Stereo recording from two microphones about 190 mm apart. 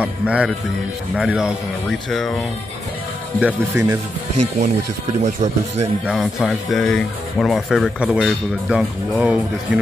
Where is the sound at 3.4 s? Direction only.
15° right (ahead or behind).